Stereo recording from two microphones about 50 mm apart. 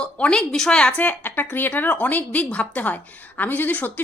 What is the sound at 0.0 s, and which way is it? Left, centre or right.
Speech, left.